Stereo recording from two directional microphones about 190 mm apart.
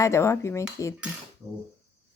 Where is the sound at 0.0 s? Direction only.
15° left (ahead or behind).